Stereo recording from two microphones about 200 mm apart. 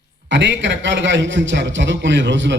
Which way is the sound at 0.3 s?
65° right (ahead or behind).